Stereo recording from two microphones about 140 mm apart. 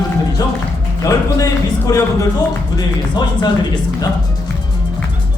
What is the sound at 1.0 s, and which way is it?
Speech, 25° left (ahead or behind).